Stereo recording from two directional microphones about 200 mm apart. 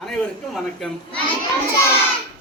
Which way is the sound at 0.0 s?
Centre (ahead or behind).